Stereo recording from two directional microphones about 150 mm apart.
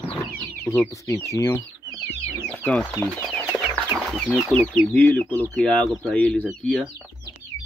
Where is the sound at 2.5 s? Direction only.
10° left (ahead or behind).